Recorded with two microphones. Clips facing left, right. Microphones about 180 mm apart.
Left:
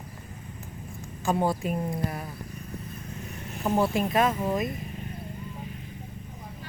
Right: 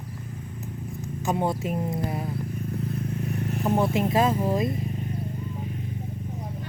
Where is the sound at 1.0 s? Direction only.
20° right (ahead or behind).